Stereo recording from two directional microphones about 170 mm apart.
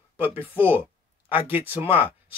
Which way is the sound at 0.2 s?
10° right (ahead or behind).